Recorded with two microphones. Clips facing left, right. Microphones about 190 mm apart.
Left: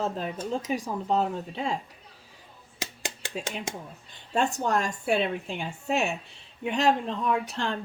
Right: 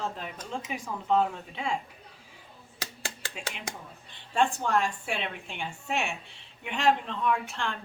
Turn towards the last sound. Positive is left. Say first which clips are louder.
# left 2 dB
turn(degrees=35)  # may be behind; listen again after turning